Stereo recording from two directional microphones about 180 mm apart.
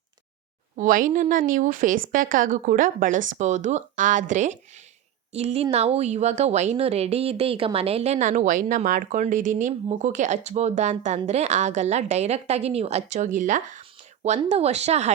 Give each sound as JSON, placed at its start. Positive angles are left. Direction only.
{"t": 0.8, "sound": "a woman's voice", "side_deg": -50}